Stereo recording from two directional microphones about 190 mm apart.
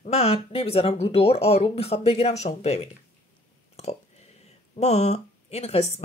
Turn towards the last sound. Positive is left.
turn(degrees=35)  # may be behind; listen again after turning